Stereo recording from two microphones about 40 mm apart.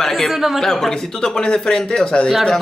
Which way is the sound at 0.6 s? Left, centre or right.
Centre.